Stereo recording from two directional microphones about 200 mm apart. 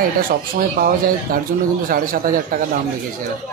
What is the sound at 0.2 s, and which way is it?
Speech, 45° right (ahead or behind).